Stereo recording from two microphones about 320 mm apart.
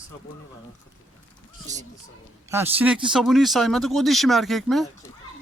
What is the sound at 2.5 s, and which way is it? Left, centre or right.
Speech, centre.